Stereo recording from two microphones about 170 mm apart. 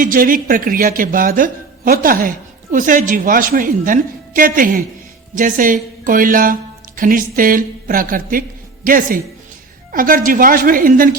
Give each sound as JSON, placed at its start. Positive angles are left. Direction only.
{"t": 0.0, "sound": "a woman's voice", "side_deg": -55}